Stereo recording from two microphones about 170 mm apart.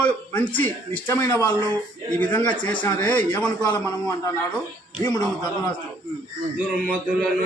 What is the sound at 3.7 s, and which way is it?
Speech, 20° left (ahead or behind).